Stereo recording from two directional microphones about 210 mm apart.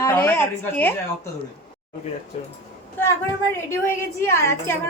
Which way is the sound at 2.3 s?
30° left (ahead or behind).